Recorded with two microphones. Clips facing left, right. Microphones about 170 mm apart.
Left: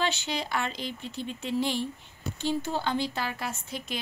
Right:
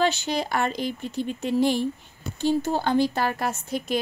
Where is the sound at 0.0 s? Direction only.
45° right (ahead or behind).